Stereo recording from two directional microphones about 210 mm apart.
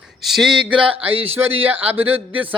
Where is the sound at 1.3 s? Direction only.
10° right (ahead or behind).